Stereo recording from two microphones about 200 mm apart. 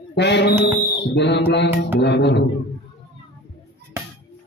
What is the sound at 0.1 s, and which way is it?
Speech, 60° left (ahead or behind).